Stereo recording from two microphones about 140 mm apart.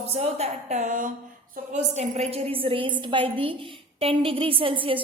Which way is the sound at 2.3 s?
45° right (ahead or behind).